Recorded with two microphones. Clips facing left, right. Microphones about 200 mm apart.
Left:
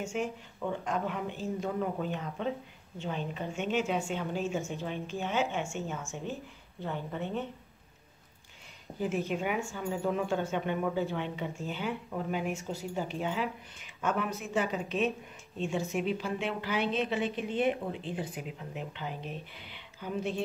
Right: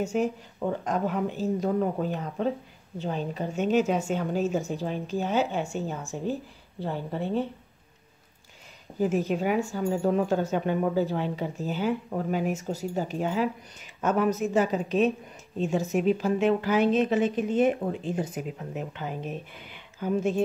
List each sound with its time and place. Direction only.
0.0 s speech: 40° right (ahead or behind)
8.9 s speech: 40° right (ahead or behind)